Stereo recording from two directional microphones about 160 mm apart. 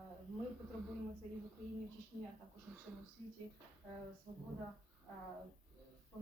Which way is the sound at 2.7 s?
Centre (ahead or behind).